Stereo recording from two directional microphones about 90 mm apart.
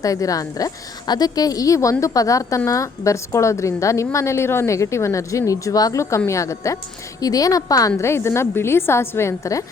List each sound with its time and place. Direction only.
0.0 s a woman's voice: 40° left (ahead or behind)